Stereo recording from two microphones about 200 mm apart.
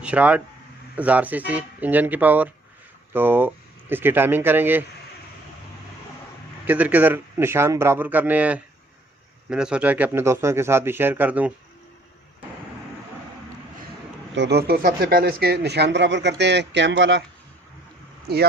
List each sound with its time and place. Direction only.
0.0 s speech: 5° right (ahead or behind)
6.7 s speech: 10° right (ahead or behind)
14.3 s speech: 55° right (ahead or behind)